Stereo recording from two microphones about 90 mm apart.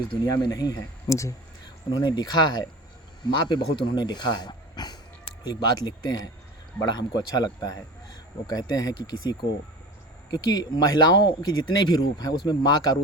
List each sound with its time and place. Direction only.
0.4 s speech: 50° left (ahead or behind)
1.9 s speech: 50° left (ahead or behind)